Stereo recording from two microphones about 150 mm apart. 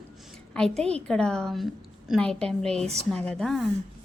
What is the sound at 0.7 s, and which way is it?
Speech, 45° right (ahead or behind).